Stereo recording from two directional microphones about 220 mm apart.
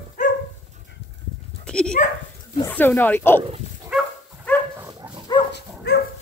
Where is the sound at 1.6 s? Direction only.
5° left (ahead or behind).